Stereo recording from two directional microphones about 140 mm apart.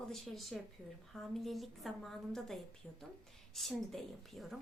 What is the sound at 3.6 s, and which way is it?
Speech, centre (ahead or behind).